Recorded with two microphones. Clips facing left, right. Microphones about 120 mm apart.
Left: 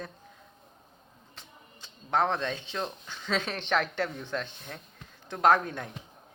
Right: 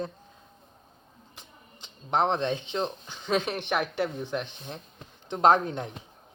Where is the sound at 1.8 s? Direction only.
20° right (ahead or behind).